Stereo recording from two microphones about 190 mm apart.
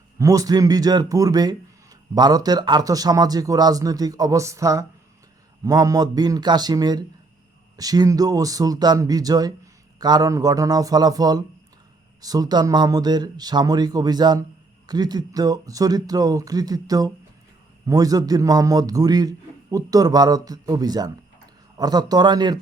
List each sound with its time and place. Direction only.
0.2 s speech: 20° right (ahead or behind)